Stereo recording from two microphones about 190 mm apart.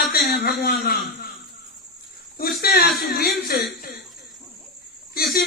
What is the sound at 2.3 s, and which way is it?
Speech, 55° left (ahead or behind).